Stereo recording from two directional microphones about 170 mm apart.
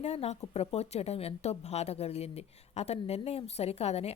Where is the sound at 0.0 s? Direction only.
40° left (ahead or behind).